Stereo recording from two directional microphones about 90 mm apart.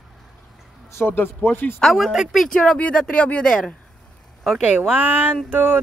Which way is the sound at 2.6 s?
15° left (ahead or behind).